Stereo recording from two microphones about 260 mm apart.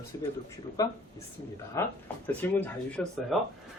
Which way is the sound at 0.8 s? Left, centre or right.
Centre.